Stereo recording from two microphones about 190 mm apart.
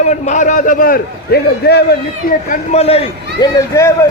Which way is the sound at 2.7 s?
30° left (ahead or behind).